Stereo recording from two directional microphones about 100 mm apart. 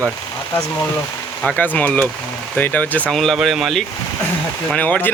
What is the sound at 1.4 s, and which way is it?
Speech, 15° left (ahead or behind).